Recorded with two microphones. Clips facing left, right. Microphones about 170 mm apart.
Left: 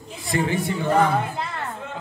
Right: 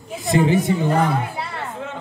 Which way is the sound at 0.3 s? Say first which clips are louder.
Right 6 dB; 20° right (ahead or behind).